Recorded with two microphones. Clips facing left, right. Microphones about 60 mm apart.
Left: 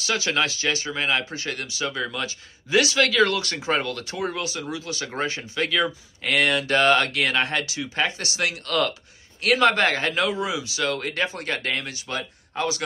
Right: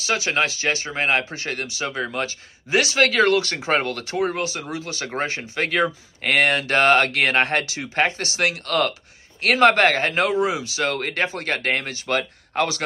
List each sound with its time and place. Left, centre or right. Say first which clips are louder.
0.0 s speech: right 2 dB; right